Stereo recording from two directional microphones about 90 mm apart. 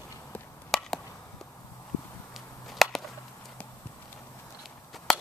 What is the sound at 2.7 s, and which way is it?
Whip, centre (ahead or behind).